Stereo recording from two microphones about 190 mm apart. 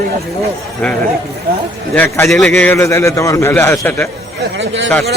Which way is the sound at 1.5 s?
55° right (ahead or behind).